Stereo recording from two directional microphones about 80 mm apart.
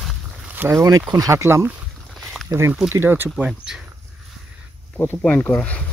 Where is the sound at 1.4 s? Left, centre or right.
Right.